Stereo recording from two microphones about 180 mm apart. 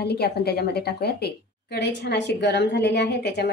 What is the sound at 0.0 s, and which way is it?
A woman's voice, 65° left (ahead or behind).